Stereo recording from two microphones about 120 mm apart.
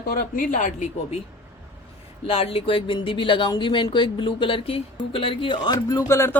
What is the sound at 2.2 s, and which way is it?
Speech, 55° left (ahead or behind).